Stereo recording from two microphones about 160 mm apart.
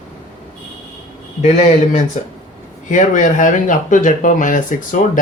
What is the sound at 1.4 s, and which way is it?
Speech, 45° left (ahead or behind).